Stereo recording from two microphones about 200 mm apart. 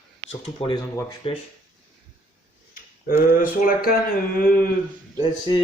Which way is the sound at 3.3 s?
45° left (ahead or behind).